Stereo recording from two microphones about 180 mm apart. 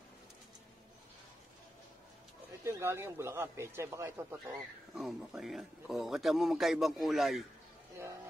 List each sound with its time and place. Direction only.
2.6 s speech: 15° right (ahead or behind)
4.9 s a man's voice: centre (ahead or behind)